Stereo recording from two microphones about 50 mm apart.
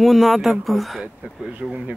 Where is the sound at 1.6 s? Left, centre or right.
Right.